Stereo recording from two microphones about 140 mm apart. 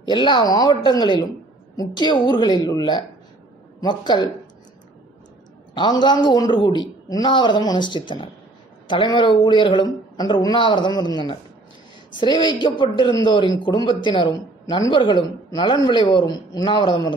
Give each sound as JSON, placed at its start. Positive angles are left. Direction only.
{"t": 0.0, "sound": "speech", "side_deg": 35}
{"t": 5.8, "sound": "speech", "side_deg": 35}